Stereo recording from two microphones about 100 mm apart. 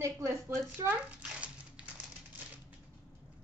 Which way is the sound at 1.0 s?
15° right (ahead or behind).